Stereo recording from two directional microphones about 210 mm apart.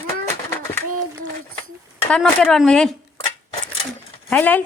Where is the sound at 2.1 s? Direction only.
5° left (ahead or behind).